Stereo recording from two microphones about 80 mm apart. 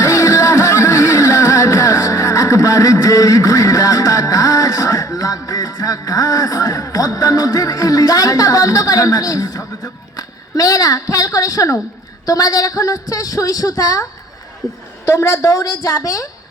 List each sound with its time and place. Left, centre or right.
0.0 s music: left
15.0 s a woman's voice: left